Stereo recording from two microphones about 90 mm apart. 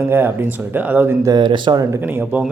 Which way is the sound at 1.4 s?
65° right (ahead or behind).